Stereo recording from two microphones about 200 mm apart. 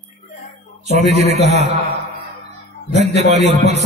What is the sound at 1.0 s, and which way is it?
Speech, 35° right (ahead or behind).